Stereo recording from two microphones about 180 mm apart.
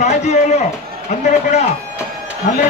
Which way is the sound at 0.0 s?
40° left (ahead or behind).